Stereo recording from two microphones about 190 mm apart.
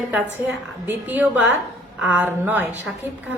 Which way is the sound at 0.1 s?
10° right (ahead or behind).